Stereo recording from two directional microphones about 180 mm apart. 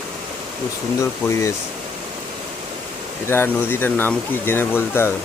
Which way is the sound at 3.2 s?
10° left (ahead or behind).